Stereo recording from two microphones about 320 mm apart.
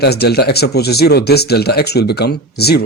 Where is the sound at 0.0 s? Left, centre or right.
Left.